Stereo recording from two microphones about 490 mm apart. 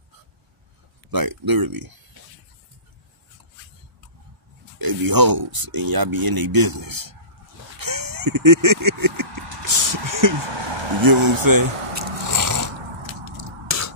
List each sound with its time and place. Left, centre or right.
1.1 s speech: right
4.7 s speech: right
7.8 s fowl: right
9.9 s speech: right
10.3 s speech: right
11.4 s biting: right